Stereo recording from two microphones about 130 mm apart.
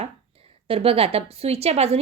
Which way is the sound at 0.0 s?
50° right (ahead or behind).